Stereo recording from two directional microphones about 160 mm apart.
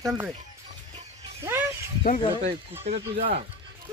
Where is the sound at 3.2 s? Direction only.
55° right (ahead or behind).